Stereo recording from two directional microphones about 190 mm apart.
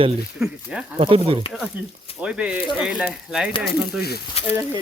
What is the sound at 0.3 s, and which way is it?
Speech, 5° right (ahead or behind).